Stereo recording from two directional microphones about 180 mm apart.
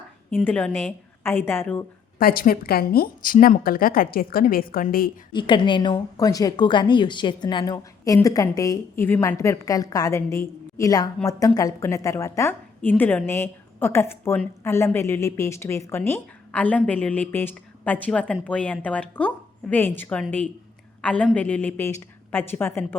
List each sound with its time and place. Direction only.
0.4 s a woman's voice: 10° left (ahead or behind)
2.1 s speech: 55° left (ahead or behind)
5.3 s a woman's voice: 25° left (ahead or behind)